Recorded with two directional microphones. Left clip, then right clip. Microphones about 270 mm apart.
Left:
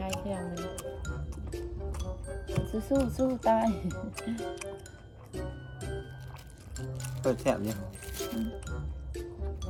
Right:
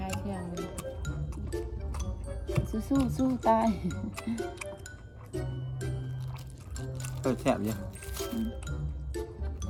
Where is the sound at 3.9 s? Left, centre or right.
Centre.